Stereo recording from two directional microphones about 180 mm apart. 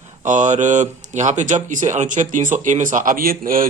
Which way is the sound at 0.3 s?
40° right (ahead or behind).